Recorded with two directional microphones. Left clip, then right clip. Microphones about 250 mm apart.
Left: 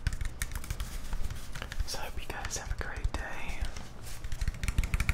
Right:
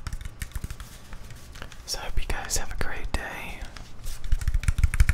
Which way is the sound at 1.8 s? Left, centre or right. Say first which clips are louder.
Right 8 dB; centre.